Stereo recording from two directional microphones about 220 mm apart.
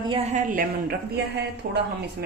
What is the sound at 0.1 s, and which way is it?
Speech, 30° right (ahead or behind).